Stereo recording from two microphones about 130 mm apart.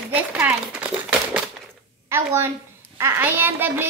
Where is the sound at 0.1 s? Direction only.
10° right (ahead or behind).